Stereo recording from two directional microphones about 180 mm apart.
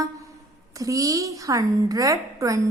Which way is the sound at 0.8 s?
20° right (ahead or behind).